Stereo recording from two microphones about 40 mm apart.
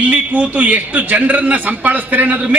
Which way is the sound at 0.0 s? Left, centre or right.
Right.